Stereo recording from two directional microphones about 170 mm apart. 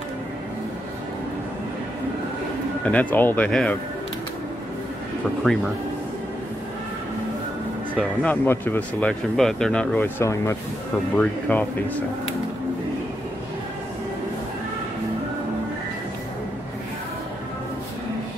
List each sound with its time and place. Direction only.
2.8 s speech: 10° left (ahead or behind)
8.2 s speech: 10° left (ahead or behind)